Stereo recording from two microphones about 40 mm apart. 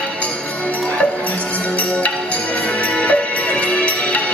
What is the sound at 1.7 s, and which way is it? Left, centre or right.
Music, left.